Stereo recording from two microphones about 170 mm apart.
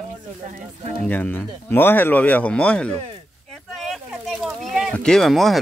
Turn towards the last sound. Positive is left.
turn(degrees=0)  # may be behind; listen again after turning